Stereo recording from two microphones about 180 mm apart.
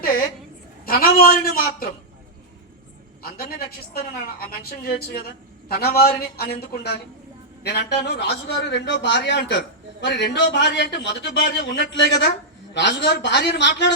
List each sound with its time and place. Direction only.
0.0 s a woman's voice: 55° left (ahead or behind)
3.2 s a woman's voice: 55° left (ahead or behind); by 13.9 s 75° left (ahead or behind)